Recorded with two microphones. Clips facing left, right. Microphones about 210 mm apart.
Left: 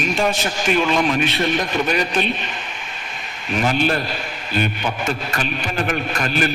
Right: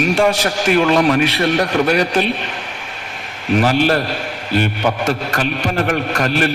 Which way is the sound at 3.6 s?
70° right (ahead or behind).